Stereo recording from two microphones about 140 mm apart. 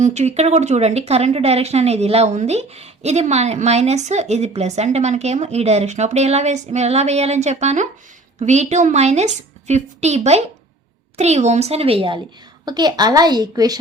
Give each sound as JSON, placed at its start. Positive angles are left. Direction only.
{"t": 0.0, "sound": "a woman's voice", "side_deg": -50}